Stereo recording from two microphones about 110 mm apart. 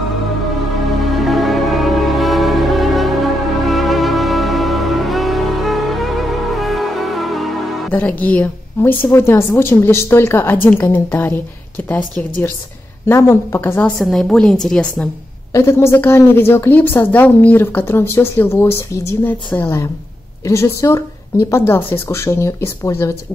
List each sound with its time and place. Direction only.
1.0 s music: centre (ahead or behind)
7.9 s a woman's voice: 15° left (ahead or behind)
13.0 s a woman's voice: 25° left (ahead or behind)
13.7 s a woman's voice: 10° left (ahead or behind)
15.5 s a woman's voice: 25° left (ahead or behind)